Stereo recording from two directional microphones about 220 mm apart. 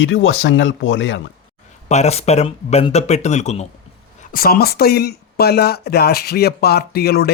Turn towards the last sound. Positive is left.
turn(degrees=45)  # may be behind; listen again after turning